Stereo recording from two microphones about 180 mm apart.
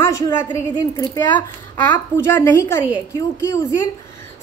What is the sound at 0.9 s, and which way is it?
Speech, 25° left (ahead or behind).